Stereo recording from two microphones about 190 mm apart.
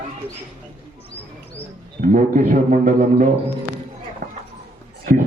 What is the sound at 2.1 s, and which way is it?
Speech, 45° right (ahead or behind).